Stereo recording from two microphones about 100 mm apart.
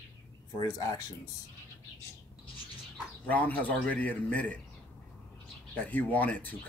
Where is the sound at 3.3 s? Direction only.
15° left (ahead or behind).